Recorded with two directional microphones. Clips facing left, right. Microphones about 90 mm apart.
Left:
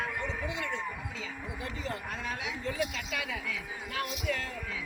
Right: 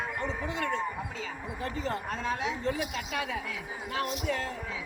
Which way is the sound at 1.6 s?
35° right (ahead or behind).